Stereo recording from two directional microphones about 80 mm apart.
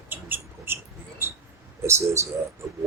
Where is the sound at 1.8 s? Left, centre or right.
Right.